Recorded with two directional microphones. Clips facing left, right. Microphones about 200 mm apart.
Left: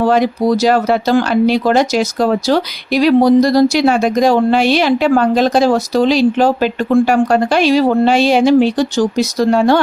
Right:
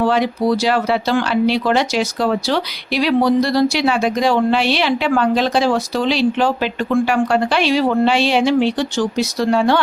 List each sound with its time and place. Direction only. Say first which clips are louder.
0.0 s speech: left 4 dB; 45° left (ahead or behind)